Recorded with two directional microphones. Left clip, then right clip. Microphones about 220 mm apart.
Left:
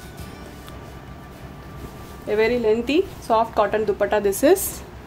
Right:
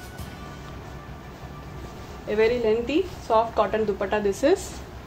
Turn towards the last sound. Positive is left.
turn(degrees=50)  # may be behind; listen again after turning